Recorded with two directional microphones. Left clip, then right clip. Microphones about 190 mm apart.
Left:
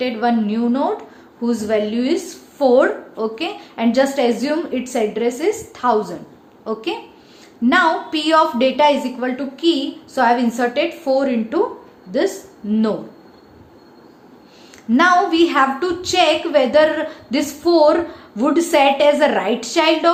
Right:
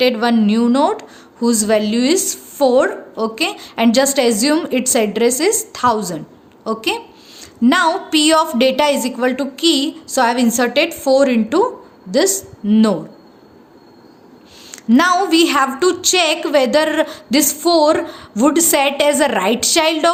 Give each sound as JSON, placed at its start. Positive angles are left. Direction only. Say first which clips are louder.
{"t": 0.0, "sound": "a woman's voice", "louder": "right 4 dB", "side_deg": -50}
{"t": 14.7, "sound": "a woman's voice", "louder": "even", "side_deg": -45}